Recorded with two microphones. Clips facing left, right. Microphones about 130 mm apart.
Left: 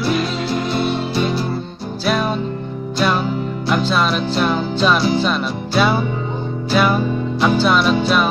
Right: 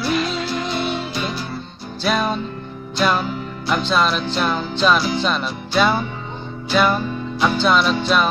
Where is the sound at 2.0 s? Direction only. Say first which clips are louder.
Left 1 dB; 5° left (ahead or behind).